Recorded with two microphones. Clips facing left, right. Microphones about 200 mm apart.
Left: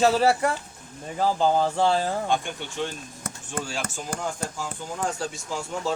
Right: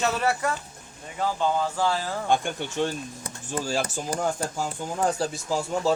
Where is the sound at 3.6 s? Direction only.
35° right (ahead or behind).